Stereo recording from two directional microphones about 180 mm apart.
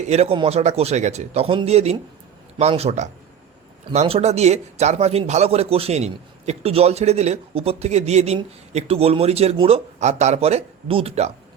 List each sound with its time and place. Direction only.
0.0 s a man's voice: 35° right (ahead or behind)